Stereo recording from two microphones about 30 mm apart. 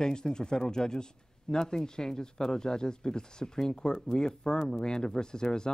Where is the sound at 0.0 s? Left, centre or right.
Left.